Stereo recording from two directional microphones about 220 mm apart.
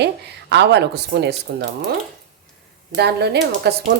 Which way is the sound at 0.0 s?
50° right (ahead or behind).